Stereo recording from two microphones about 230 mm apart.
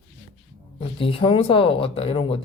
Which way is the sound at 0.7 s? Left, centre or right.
Left.